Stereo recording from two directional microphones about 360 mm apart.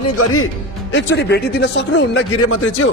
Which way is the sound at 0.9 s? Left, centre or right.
Left.